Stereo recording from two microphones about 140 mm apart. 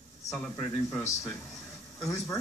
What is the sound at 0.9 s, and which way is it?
Speech, 20° left (ahead or behind).